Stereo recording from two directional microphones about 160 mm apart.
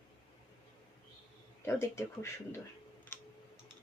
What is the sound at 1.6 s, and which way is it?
Speech, 15° left (ahead or behind).